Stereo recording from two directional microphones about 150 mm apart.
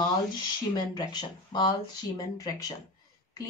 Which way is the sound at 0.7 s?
30° left (ahead or behind).